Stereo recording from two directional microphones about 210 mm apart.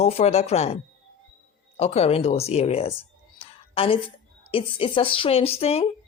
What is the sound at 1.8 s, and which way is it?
Speech, 30° left (ahead or behind).